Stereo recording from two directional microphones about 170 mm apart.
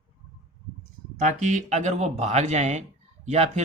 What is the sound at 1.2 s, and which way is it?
Speech, 45° right (ahead or behind).